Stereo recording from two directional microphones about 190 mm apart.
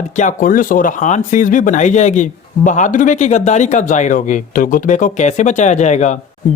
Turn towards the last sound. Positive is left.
turn(degrees=40)  # may be behind; listen again after turning